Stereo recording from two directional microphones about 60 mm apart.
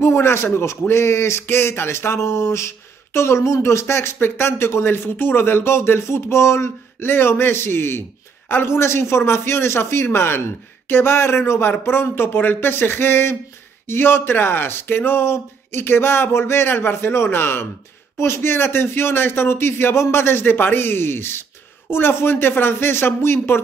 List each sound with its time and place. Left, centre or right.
0.0 s a man's voice: left